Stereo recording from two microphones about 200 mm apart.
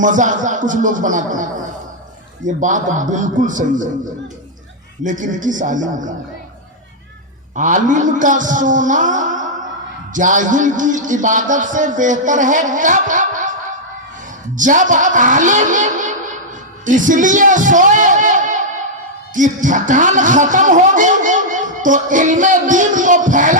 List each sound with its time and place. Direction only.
0.0 s a man's voice: 40° right (ahead or behind)
5.0 s a man's voice: 40° right (ahead or behind)
7.5 s a man's voice: 40° right (ahead or behind)
14.5 s a man's voice: 40° right (ahead or behind)